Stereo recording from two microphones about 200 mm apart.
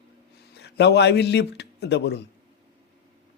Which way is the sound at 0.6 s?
55° left (ahead or behind).